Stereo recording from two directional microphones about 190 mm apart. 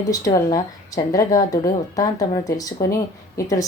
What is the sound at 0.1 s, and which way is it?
Speech, 20° left (ahead or behind).